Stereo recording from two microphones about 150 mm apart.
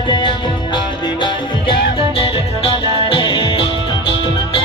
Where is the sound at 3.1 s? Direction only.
35° left (ahead or behind).